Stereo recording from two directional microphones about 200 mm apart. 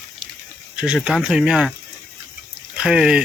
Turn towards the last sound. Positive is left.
turn(degrees=-5)  # may be behind; listen again after turning